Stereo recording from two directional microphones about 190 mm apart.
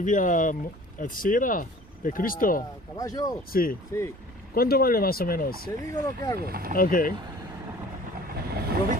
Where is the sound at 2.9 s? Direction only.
20° left (ahead or behind).